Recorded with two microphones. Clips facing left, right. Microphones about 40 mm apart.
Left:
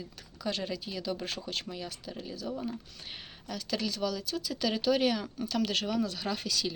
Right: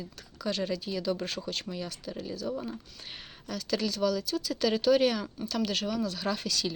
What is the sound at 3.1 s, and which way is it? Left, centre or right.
Speech, centre.